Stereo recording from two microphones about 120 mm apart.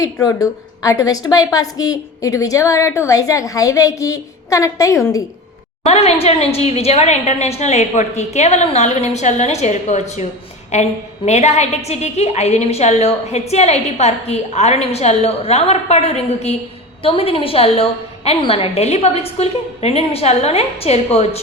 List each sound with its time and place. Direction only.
0.0 s a woman's voice: 30° left (ahead or behind)
5.8 s a woman's voice: 60° left (ahead or behind)
17.0 s a woman's voice: 50° left (ahead or behind)